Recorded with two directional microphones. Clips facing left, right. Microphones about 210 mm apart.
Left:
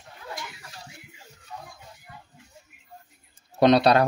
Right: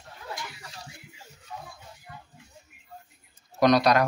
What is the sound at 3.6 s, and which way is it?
Speech, 30° left (ahead or behind).